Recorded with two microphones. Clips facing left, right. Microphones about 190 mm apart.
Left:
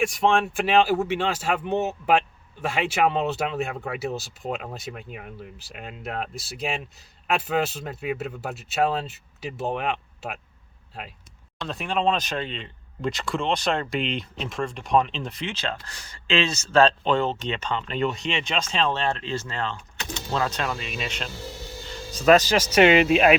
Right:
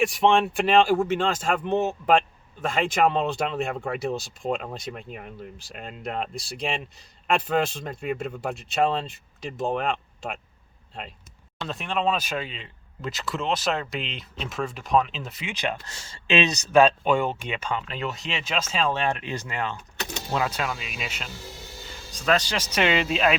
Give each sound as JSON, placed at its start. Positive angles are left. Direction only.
{"t": 0.0, "sound": "speech", "side_deg": 0}
{"t": 11.6, "sound": "speech", "side_deg": 0}
{"t": 15.5, "sound": "speech", "side_deg": -15}
{"t": 22.7, "sound": "speech", "side_deg": 55}